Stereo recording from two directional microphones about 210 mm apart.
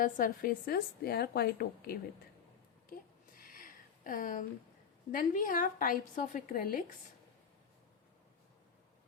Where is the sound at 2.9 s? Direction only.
40° left (ahead or behind).